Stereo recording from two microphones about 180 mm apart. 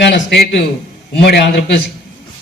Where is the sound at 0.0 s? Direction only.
75° left (ahead or behind).